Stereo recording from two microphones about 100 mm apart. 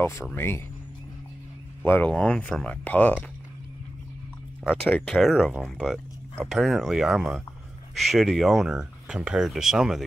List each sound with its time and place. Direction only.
0.0 s speech: 25° left (ahead or behind)
1.9 s speech: 15° left (ahead or behind)
4.6 s speech: 10° left (ahead or behind); by 10.0 s 5° right (ahead or behind)